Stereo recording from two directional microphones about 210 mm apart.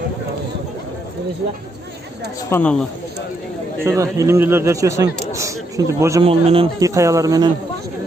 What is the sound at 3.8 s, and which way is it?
A man's voice, 15° right (ahead or behind).